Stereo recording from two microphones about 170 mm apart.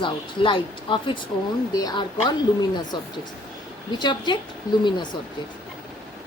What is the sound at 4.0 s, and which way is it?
Speech, 25° left (ahead or behind).